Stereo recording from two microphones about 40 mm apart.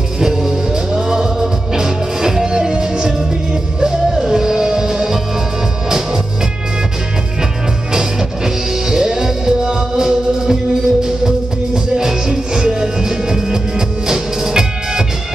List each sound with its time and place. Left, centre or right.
0.2 s music: centre
7.9 s music: centre